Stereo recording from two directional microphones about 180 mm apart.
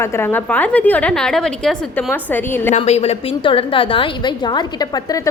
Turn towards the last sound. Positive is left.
turn(degrees=25)  # may be behind; listen again after turning